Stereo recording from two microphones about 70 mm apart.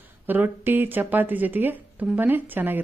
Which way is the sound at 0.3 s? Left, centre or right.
Right.